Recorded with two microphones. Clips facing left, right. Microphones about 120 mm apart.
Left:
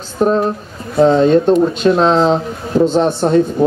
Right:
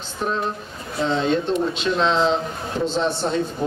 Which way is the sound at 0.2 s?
45° left (ahead or behind).